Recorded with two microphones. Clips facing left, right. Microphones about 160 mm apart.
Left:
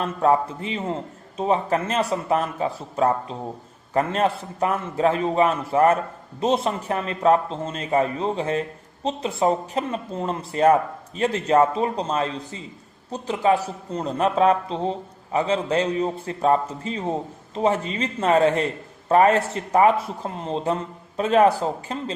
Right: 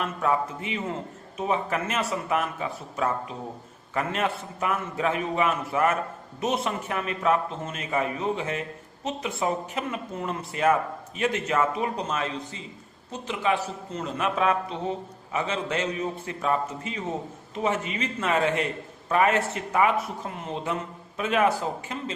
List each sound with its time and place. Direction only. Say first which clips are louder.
0.0 s a man's voice: left 6 dB; 35° left (ahead or behind)